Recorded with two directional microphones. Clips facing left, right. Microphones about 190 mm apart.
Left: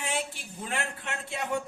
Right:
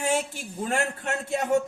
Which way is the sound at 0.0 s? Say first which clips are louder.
Right 7 dB; 45° right (ahead or behind).